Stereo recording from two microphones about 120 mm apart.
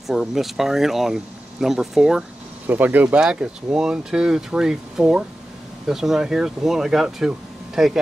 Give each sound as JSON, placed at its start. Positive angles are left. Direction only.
{"t": 0.0, "sound": "speech", "side_deg": -5}